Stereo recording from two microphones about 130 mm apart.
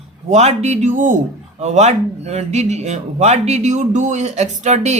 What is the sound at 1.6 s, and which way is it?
Speech, 60° right (ahead or behind).